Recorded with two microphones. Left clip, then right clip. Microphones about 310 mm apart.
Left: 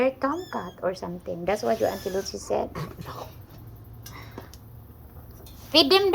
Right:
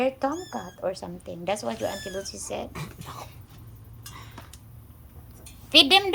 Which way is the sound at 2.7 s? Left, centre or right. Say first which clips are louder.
Left 3 dB; right.